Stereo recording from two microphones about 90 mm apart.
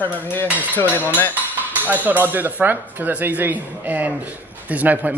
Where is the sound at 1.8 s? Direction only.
20° right (ahead or behind).